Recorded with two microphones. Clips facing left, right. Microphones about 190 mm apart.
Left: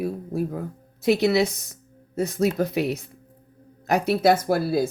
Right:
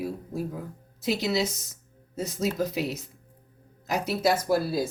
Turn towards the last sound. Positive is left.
turn(degrees=60)  # may be behind; listen again after turning